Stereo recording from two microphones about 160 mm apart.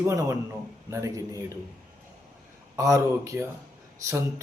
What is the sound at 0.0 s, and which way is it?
A man's voice, 20° right (ahead or behind).